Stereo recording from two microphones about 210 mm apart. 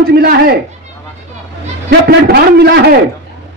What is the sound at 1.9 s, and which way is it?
A man's voice, 50° right (ahead or behind).